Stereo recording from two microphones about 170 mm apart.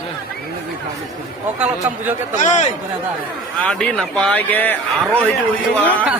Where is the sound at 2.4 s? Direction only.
45° left (ahead or behind).